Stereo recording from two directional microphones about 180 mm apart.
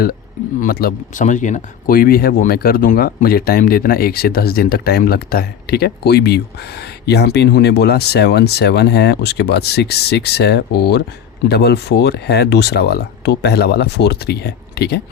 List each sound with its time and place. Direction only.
0.6 s speech: 55° left (ahead or behind)